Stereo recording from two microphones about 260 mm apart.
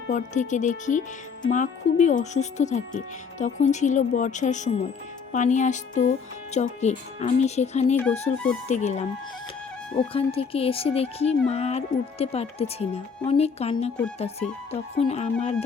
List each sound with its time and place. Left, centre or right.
0.1 s speech: left
10.1 s speech: left